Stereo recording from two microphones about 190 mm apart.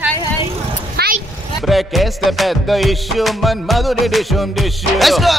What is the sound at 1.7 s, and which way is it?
Music, centre (ahead or behind).